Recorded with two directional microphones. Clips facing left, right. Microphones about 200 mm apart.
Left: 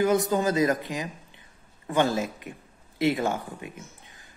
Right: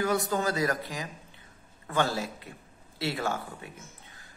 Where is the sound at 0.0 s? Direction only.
20° left (ahead or behind).